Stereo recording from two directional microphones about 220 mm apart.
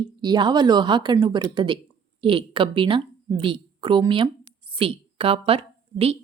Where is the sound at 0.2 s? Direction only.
20° right (ahead or behind).